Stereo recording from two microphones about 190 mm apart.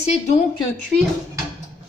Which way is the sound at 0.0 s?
35° left (ahead or behind).